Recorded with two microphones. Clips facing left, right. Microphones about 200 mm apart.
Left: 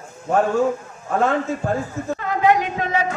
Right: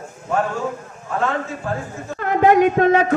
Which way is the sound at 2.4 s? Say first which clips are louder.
Right 6 dB; 50° right (ahead or behind).